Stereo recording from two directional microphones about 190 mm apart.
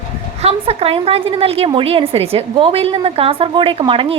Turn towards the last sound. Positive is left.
turn(degrees=-30)  # may be behind; listen again after turning